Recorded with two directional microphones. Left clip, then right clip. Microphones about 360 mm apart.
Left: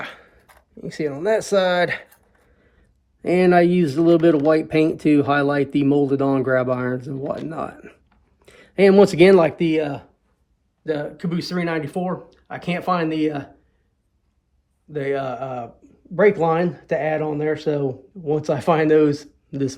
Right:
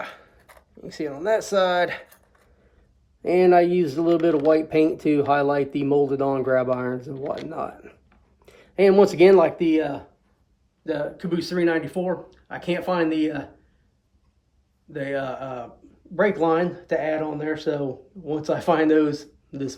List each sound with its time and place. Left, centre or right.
0.0 s a sound: centre
0.9 s speech: centre
3.2 s speech: left
14.9 s speech: centre